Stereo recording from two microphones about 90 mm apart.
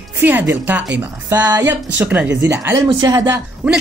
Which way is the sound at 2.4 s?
30° right (ahead or behind).